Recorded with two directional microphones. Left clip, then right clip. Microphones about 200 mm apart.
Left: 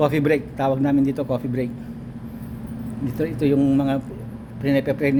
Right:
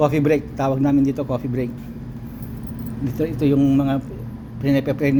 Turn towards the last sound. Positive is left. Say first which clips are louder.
# even
turn(degrees=5)  # may be behind; listen again after turning